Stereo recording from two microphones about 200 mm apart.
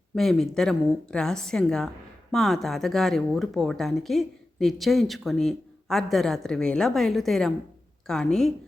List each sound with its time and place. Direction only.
0.2 s speech: centre (ahead or behind)